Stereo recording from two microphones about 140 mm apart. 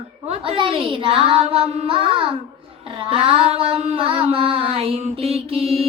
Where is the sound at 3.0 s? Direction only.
40° right (ahead or behind).